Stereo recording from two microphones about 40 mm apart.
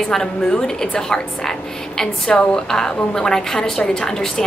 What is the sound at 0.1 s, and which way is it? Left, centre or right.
A woman's voice, centre.